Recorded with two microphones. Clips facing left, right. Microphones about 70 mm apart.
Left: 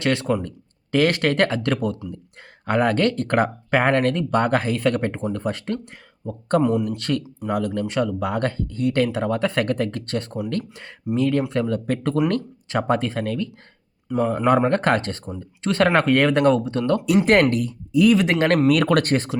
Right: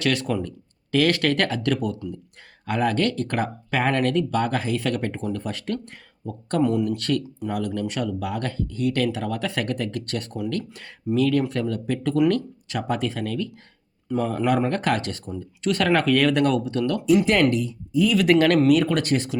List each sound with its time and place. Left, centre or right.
0.0 s speech: left
6.6 s speech: centre
6.9 s speech: left
11.9 s speech: left
14.2 s speech: left
17.5 s speech: left
18.2 s speech: left
18.7 s speech: left
19.1 s speech: left